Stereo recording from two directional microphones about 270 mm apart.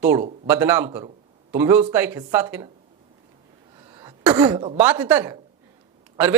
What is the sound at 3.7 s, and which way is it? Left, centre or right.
A man's voice, centre.